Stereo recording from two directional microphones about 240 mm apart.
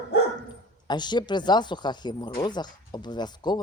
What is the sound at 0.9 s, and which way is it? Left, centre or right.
Speech, centre.